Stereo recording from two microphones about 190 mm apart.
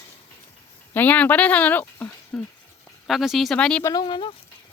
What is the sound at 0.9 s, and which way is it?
Speech, 10° left (ahead or behind).